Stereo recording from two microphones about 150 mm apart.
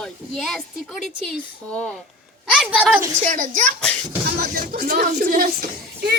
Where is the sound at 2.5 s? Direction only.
5° right (ahead or behind).